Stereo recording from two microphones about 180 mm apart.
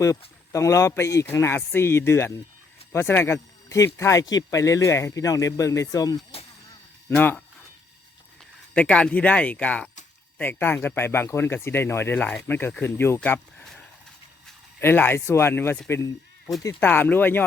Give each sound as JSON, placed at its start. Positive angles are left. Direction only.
{"t": 0.0, "sound": "speech", "side_deg": 15}
{"t": 7.1, "sound": "speech", "side_deg": 5}
{"t": 8.7, "sound": "speech", "side_deg": 10}